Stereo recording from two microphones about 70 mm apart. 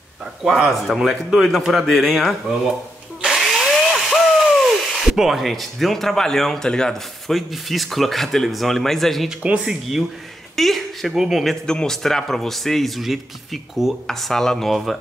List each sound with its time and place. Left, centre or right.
0.4 s a man's voice: centre
3.3 s a sound: centre
9.4 s speech: centre
10.5 s a sound: centre
11.1 s a man's voice: centre
11.6 s a man's voice: centre